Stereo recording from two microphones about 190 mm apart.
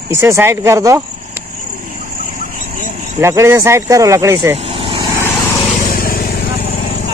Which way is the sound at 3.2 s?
15° right (ahead or behind).